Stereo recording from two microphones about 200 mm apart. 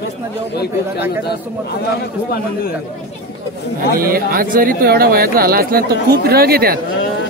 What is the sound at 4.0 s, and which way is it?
Speech, 45° right (ahead or behind).